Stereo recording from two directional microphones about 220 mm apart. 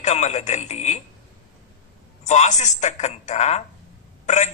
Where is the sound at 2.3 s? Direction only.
30° left (ahead or behind).